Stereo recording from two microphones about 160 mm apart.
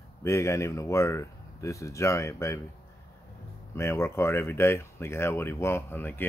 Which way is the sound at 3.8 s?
15° left (ahead or behind).